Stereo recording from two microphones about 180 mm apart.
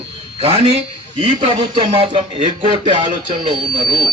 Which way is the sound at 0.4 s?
30° right (ahead or behind).